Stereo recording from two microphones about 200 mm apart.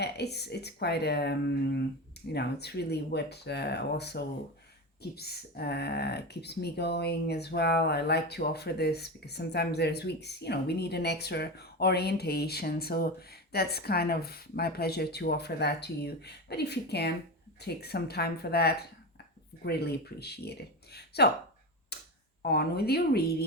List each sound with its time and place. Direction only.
0.0 s speech: 55° left (ahead or behind)
21.9 s tick-tock: 55° left (ahead or behind)
22.4 s speech: 50° left (ahead or behind)